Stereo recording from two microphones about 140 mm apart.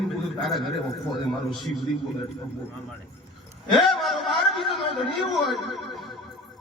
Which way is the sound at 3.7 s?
Centre (ahead or behind).